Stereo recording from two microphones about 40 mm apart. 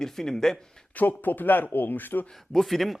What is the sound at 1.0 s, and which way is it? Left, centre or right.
Speech, left.